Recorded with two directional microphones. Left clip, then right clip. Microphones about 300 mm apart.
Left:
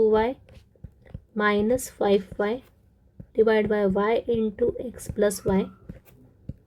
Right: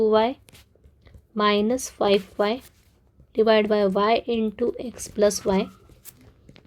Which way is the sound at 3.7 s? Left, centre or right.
Right.